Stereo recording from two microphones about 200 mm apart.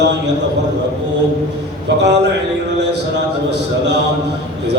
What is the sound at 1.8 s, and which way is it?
Speech, 60° right (ahead or behind).